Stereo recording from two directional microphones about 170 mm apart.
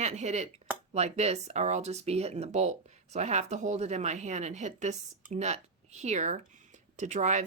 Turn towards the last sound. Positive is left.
turn(degrees=-45)  # may be behind; listen again after turning